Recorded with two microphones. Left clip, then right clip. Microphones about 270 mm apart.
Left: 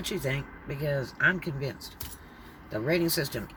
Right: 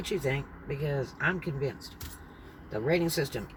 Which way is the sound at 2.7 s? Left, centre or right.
Left.